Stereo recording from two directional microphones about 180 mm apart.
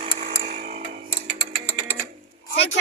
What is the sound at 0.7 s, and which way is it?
Tick-tock, 35° right (ahead or behind).